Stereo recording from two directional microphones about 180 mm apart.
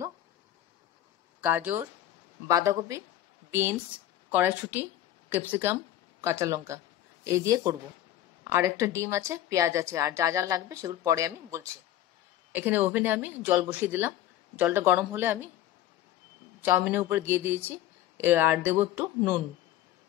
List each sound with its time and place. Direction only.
1.4 s a woman's voice: 10° right (ahead or behind)
16.6 s speech: 10° right (ahead or behind)